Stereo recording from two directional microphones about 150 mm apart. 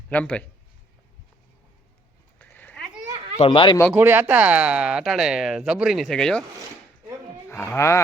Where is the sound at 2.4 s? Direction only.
10° left (ahead or behind).